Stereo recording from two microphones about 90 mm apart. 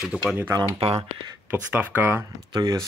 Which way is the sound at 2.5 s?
45° right (ahead or behind).